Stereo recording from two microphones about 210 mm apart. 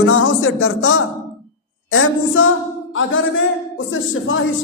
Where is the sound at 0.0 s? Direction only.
70° left (ahead or behind).